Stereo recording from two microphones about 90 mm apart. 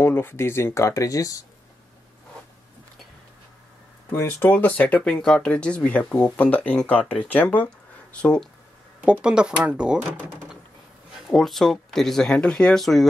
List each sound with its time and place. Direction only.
0.0 s speech: 25° left (ahead or behind); by 1.4 s 40° left (ahead or behind)
4.2 s speech: 25° left (ahead or behind)
9.0 s speech: 10° right (ahead or behind)
11.1 s speech: centre (ahead or behind)